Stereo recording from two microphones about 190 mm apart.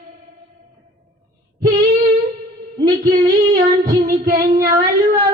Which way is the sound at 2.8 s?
25° right (ahead or behind).